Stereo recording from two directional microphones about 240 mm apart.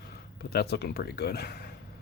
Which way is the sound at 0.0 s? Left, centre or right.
Left.